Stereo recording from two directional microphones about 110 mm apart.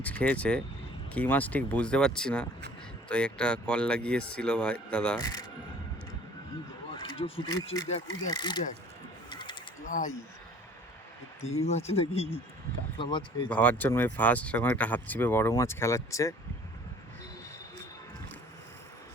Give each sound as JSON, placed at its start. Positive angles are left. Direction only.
{"t": 0.0, "sound": "speech", "side_deg": 15}
{"t": 5.2, "sound": "speech", "side_deg": 35}
{"t": 6.9, "sound": "a sound", "side_deg": 55}
{"t": 7.4, "sound": "speech", "side_deg": 35}
{"t": 9.3, "sound": "bird", "side_deg": 45}
{"t": 11.5, "sound": "speech", "side_deg": 85}
{"t": 11.9, "sound": "speech", "side_deg": 65}
{"t": 13.0, "sound": "speech", "side_deg": 45}
{"t": 13.5, "sound": "speech", "side_deg": 15}